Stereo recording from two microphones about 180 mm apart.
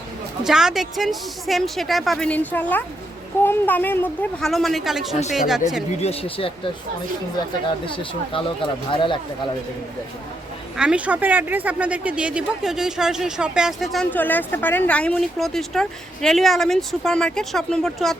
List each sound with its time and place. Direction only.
0.4 s speech: 5° right (ahead or behind)
6.0 s speech: 35° left (ahead or behind)
7.9 s speech: 30° left (ahead or behind)
10.8 s speech: 5° right (ahead or behind)